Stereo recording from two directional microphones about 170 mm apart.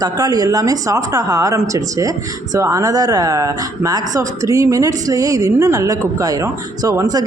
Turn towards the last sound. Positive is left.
turn(degrees=-20)  # may be behind; listen again after turning